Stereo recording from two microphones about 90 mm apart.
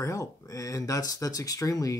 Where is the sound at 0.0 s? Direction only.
35° left (ahead or behind).